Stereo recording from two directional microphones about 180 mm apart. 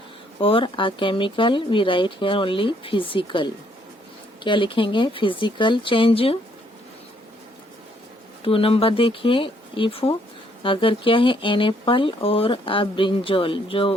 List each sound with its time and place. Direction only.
0.3 s speech: 30° left (ahead or behind)
8.4 s speech: 30° left (ahead or behind)